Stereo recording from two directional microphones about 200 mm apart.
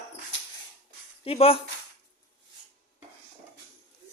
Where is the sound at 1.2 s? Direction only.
30° left (ahead or behind).